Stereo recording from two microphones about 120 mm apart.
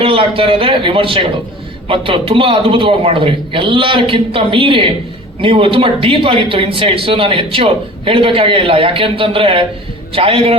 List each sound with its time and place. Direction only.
0.0 s speech: 50° right (ahead or behind)